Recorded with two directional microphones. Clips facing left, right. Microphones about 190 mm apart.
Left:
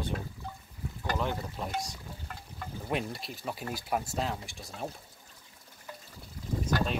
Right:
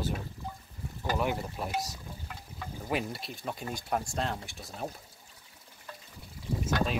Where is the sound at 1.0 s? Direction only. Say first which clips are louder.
Right 2 dB; 10° right (ahead or behind).